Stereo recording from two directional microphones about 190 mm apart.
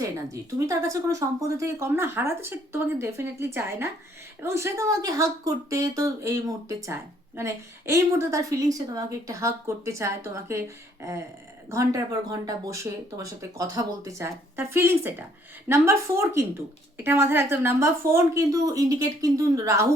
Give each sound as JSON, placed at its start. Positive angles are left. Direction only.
{"t": 0.0, "sound": "a woman's voice", "side_deg": -15}